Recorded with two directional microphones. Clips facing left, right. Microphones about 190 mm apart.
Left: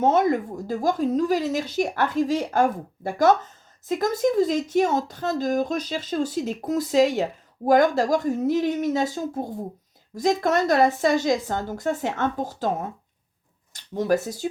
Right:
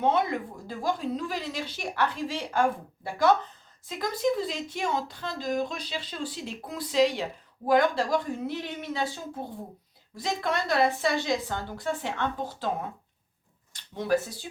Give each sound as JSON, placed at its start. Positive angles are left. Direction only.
{"t": 0.0, "sound": "speech", "side_deg": 45}
{"t": 13.7, "sound": "speech", "side_deg": 45}